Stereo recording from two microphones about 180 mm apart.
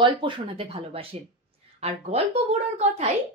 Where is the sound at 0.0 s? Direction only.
30° right (ahead or behind).